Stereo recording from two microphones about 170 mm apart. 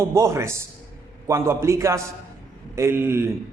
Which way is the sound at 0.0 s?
15° right (ahead or behind).